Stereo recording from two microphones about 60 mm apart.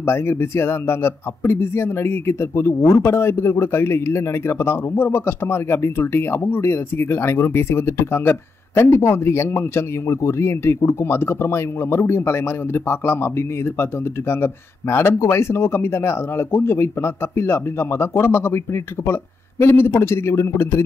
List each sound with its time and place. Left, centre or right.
0.0 s speech: left
14.3 s speech: left
19.6 s speech: left